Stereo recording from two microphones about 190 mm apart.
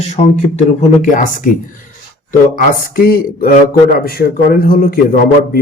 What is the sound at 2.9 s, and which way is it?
A man's voice, 50° left (ahead or behind).